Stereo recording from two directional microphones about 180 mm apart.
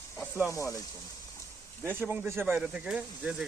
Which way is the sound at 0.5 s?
20° left (ahead or behind).